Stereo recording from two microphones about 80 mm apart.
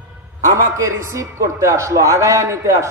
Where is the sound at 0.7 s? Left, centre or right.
Right.